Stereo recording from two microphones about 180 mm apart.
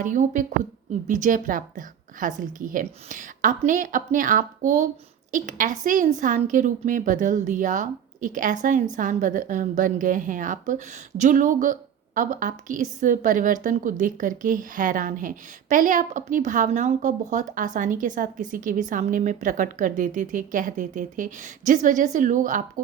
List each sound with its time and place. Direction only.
0.0 s a woman's voice: 45° right (ahead or behind)